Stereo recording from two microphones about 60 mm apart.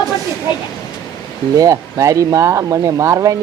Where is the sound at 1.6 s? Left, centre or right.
Right.